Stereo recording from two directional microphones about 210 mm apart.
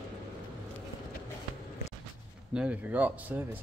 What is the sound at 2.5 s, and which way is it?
Speech, 5° right (ahead or behind).